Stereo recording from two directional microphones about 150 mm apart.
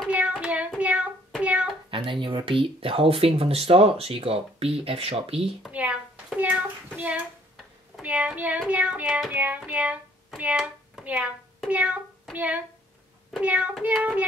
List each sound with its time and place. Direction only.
0.1 s child singing: 5° right (ahead or behind)
1.4 s a sound: 10° right (ahead or behind)
1.9 s speech: 35° right (ahead or behind)
5.6 s hands: 10° right (ahead or behind)
7.5 s child singing: 5° right (ahead or behind)
9.6 s speech: 10° right (ahead or behind)
13.3 s child singing: 10° right (ahead or behind)